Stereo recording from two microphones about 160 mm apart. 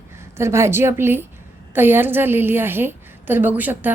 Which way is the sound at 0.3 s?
15° right (ahead or behind).